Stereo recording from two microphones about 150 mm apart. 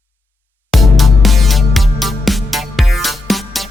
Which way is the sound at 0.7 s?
Centre (ahead or behind).